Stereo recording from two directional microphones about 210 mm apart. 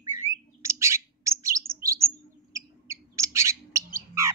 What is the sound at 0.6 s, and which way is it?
Bird, 15° right (ahead or behind).